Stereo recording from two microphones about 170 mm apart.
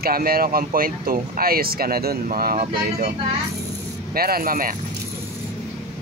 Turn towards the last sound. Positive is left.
turn(degrees=-55)  # may be behind; listen again after turning